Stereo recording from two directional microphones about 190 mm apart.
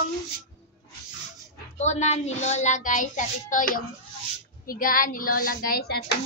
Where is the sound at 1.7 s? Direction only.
35° left (ahead or behind); by 6.0 s 55° left (ahead or behind).